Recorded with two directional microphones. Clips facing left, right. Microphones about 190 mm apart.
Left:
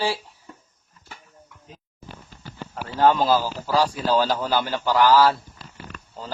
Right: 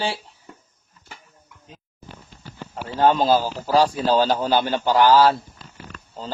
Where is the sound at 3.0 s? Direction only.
20° right (ahead or behind).